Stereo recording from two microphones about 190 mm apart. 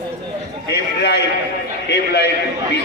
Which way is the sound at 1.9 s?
60° left (ahead or behind).